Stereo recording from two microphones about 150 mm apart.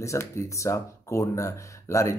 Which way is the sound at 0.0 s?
20° left (ahead or behind).